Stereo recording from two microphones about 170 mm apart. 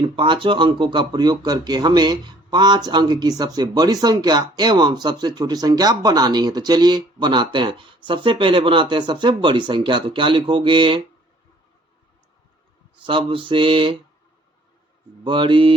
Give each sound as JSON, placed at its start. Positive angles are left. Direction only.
{"t": 0.2, "sound": "speech", "side_deg": -30}
{"t": 13.1, "sound": "mantra", "side_deg": -30}
{"t": 15.2, "sound": "speech", "side_deg": -30}